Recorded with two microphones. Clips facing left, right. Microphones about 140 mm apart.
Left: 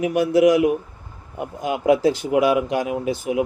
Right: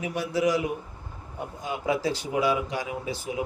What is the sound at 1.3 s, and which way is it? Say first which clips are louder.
Speech: left 8 dB; 70° left (ahead or behind).